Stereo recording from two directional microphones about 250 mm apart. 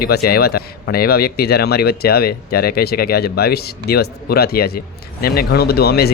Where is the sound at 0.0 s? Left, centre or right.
Left.